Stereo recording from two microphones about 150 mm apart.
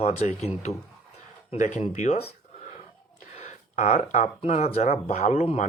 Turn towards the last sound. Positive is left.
turn(degrees=45)  # may be behind; listen again after turning